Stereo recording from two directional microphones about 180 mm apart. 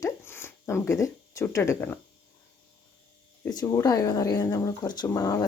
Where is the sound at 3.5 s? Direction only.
20° left (ahead or behind).